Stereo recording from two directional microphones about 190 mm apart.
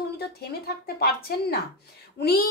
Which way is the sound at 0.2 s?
55° left (ahead or behind).